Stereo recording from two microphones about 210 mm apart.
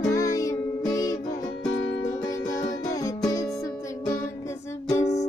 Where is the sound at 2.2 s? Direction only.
15° left (ahead or behind).